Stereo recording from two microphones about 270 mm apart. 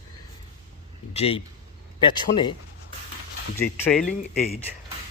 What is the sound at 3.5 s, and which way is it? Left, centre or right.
Speech, centre.